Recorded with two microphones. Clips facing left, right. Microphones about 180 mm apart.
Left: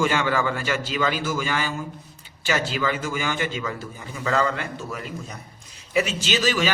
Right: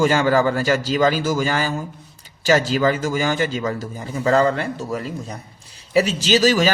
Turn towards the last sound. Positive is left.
turn(degrees=-40)  # may be behind; listen again after turning